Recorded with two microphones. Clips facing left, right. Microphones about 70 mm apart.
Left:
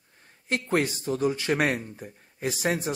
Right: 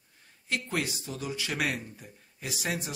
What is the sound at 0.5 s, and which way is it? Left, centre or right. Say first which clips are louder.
Speech: left 6 dB; left.